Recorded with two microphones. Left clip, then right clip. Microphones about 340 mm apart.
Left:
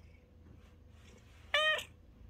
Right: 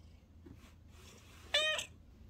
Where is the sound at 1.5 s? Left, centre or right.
Left.